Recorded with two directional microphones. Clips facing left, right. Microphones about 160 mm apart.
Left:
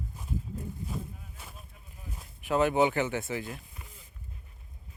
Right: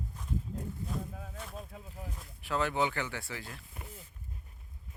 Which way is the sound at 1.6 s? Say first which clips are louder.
Right 9 dB; 90° right.